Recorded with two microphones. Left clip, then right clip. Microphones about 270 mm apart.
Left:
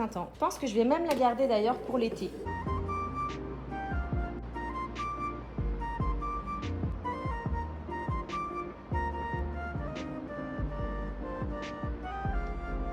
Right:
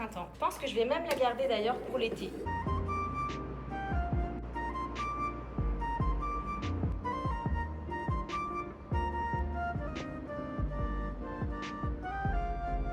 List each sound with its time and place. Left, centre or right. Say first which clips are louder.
0.6 s a woman's voice: left 5 dB; centre
2.5 s music: right 1 dB; centre
4.6 s music: left 1 dB; centre